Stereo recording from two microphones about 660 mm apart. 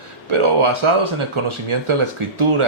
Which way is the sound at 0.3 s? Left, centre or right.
Right.